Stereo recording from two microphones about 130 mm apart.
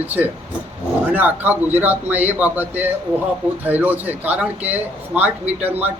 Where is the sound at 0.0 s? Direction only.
15° right (ahead or behind).